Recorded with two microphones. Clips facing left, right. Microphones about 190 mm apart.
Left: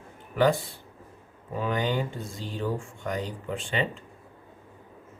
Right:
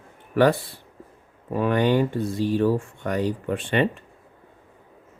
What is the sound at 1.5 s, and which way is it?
Speech, 65° right (ahead or behind).